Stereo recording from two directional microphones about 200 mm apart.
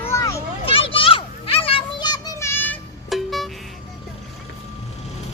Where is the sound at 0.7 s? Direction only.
25° left (ahead or behind); by 3.5 s centre (ahead or behind).